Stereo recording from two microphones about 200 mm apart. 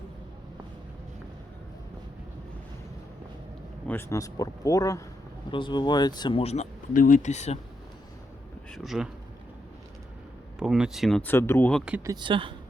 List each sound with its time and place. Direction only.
3.8 s speech: 15° left (ahead or behind); by 7.6 s 35° left (ahead or behind)
8.7 s a sound: centre (ahead or behind)
10.6 s speech: 5° right (ahead or behind)
11.9 s speech: 10° right (ahead or behind)
12.1 s speech: 25° right (ahead or behind)